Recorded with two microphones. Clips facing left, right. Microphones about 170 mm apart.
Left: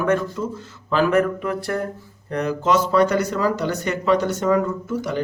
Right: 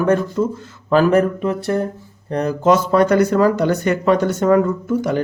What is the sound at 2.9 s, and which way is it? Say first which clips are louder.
Speech: right 5 dB; 50° right (ahead or behind).